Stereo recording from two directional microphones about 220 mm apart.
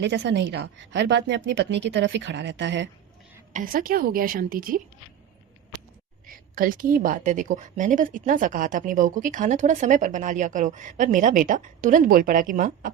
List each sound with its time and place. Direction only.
0.0 s a woman's voice: 50° right (ahead or behind)
3.5 s a woman's voice: 40° right (ahead or behind)
6.2 s a woman's voice: 40° right (ahead or behind)